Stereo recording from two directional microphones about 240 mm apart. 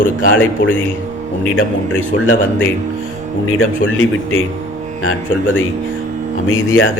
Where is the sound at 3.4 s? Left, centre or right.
Left.